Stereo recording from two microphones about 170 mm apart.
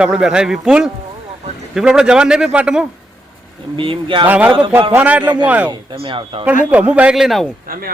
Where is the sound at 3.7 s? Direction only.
30° right (ahead or behind).